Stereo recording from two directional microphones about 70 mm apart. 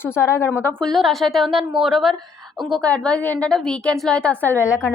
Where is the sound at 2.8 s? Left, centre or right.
Centre.